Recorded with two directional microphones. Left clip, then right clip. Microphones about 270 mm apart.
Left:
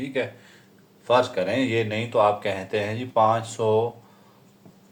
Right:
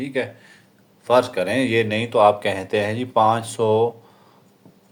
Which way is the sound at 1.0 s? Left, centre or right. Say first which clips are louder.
Right 3 dB; right.